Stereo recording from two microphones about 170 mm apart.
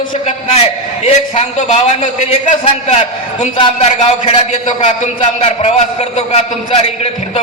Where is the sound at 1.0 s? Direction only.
40° left (ahead or behind).